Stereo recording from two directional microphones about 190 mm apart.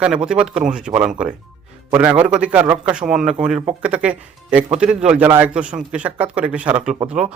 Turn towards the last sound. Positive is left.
turn(degrees=-5)  # may be behind; listen again after turning